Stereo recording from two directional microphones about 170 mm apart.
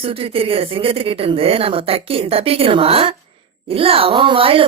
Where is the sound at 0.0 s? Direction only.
35° right (ahead or behind).